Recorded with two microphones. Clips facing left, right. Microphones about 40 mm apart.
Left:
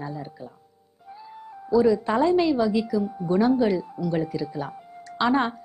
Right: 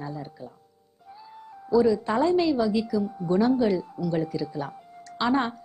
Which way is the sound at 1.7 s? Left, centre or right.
Centre.